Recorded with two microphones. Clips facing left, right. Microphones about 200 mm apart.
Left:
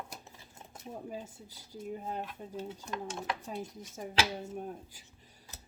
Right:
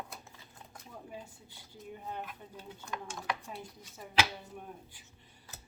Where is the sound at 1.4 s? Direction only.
40° left (ahead or behind).